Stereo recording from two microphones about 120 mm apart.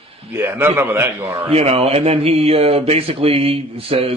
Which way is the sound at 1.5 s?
55° right (ahead or behind).